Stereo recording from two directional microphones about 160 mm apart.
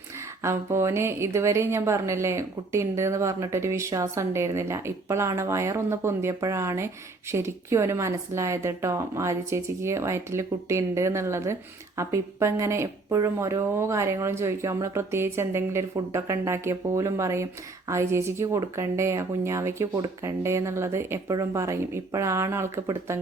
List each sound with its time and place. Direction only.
0.4 s speech: 15° right (ahead or behind)